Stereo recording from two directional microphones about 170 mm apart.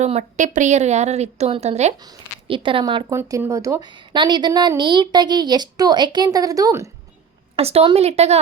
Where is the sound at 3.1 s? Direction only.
15° right (ahead or behind).